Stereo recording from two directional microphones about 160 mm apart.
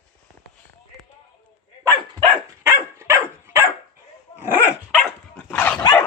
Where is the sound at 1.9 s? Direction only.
20° right (ahead or behind).